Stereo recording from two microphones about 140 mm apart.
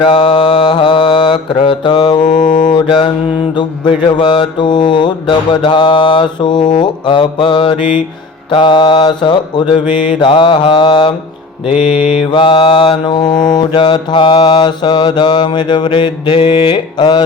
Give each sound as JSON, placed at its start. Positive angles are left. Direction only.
{"t": 0.0, "sound": "mantra", "side_deg": 35}
{"t": 2.5, "sound": "mantra", "side_deg": 70}
{"t": 2.7, "sound": "mantra", "side_deg": 35}